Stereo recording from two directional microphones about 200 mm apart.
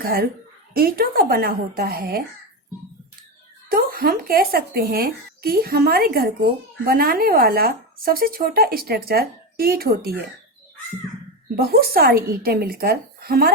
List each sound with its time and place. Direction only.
0.0 s speech: 50° right (ahead or behind)
3.7 s speech: 45° right (ahead or behind)
11.5 s speech: 50° right (ahead or behind)